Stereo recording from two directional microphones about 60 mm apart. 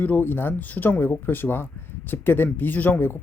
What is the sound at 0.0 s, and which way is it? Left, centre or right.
Speech, left.